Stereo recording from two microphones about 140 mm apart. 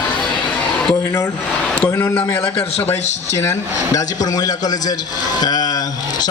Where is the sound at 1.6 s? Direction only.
10° left (ahead or behind).